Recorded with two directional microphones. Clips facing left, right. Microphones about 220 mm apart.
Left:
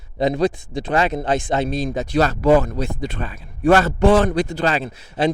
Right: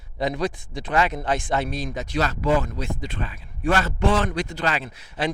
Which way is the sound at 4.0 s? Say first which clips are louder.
Left 6 dB; 55° left (ahead or behind).